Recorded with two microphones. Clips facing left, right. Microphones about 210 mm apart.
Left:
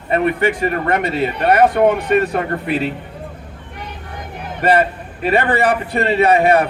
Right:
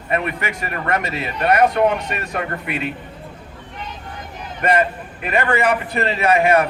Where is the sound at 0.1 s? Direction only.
30° left (ahead or behind).